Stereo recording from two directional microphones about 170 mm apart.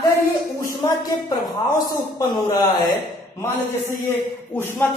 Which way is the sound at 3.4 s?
15° left (ahead or behind).